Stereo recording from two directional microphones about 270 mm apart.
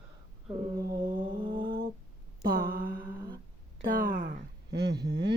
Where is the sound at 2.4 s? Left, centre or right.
Right.